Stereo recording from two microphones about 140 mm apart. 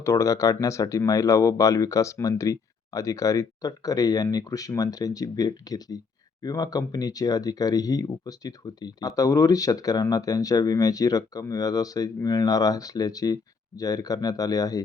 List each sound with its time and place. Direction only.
0.0 s speech: 20° left (ahead or behind)